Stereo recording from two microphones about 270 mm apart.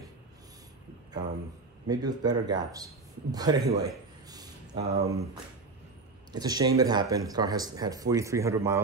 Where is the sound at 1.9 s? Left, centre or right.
Centre.